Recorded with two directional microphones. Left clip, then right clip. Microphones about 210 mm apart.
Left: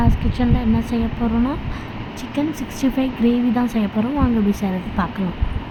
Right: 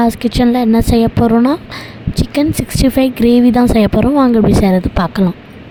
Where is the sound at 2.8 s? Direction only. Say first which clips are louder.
Right 8 dB; 60° right (ahead or behind).